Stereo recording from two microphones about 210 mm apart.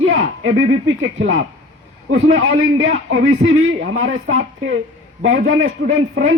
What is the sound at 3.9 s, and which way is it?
Speech, 70° right (ahead or behind).